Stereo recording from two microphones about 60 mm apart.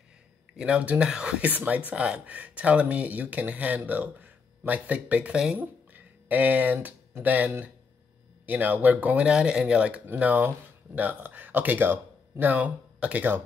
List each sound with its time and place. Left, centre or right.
0.6 s speech: centre
5.6 s speech: right